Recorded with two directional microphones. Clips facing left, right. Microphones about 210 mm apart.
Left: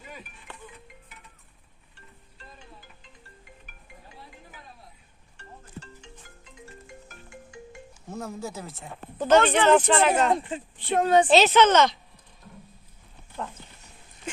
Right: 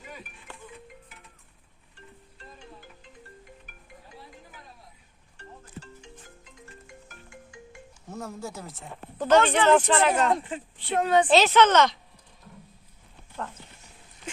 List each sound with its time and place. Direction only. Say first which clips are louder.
8.1 s speech: left 2 dB; 10° left (ahead or behind)
9.1 s speech: left 1 dB; 20° left (ahead or behind)
10.8 s a woman's voice: left 2 dB; 40° left (ahead or behind)
11.3 s speech: left 1 dB; 20° left (ahead or behind)